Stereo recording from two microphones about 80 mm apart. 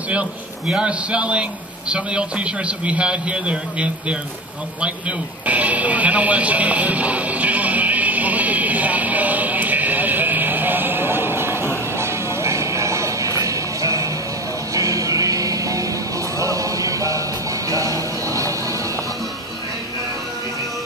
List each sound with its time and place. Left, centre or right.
0.1 s a man's voice: centre
5.5 s music: centre; by 18.8 s right